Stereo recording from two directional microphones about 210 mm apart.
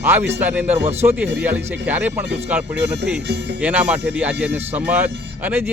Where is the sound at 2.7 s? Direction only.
55° right (ahead or behind).